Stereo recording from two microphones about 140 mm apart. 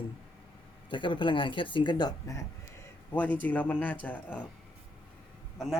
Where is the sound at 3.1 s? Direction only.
10° left (ahead or behind).